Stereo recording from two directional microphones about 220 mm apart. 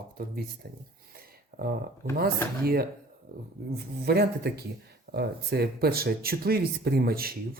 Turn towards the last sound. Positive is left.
turn(degrees=-45)  # may be behind; listen again after turning